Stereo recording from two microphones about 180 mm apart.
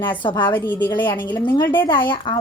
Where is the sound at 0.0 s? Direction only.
25° left (ahead or behind).